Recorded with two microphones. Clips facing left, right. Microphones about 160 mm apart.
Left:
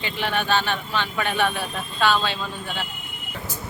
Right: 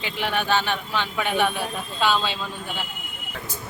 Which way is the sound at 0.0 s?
10° right (ahead or behind).